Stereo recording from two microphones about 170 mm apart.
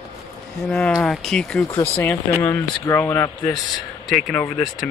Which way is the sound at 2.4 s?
20° left (ahead or behind).